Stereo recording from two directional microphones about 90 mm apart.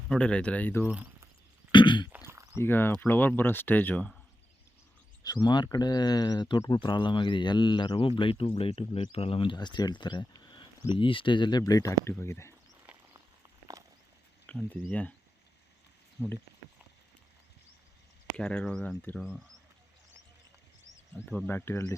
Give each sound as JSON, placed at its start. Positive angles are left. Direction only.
{"t": 0.1, "sound": "speech", "side_deg": 10}
{"t": 1.7, "sound": "cough", "side_deg": 60}
{"t": 2.0, "sound": "a sound", "side_deg": -25}
{"t": 2.6, "sound": "speech", "side_deg": 25}
{"t": 5.2, "sound": "speech", "side_deg": 50}
{"t": 6.7, "sound": "speech", "side_deg": 65}
{"t": 9.6, "sound": "speech", "side_deg": 55}
{"t": 11.6, "sound": "speech", "side_deg": 40}
{"t": 14.4, "sound": "speech", "side_deg": 15}
{"t": 16.2, "sound": "speech", "side_deg": 35}
{"t": 18.3, "sound": "speech", "side_deg": 10}
{"t": 21.2, "sound": "speech", "side_deg": 20}